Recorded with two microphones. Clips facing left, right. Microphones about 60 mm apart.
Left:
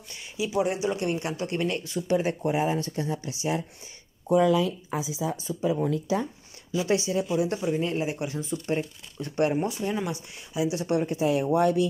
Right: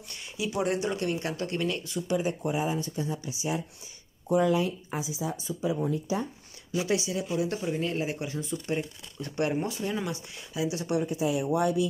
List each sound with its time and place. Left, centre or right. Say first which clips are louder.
0.1 s speech: left 4 dB; centre
0.9 s speech: left 2 dB; left
4.3 s speech: left 3 dB; left
5.2 s speech: left 3 dB; left
5.8 s speech: left 3 dB; left
6.9 s speech: left 5 dB; left
9.5 s speech: left 3 dB; centre; by 11.1 s left
11.1 s speech: left 3 dB; left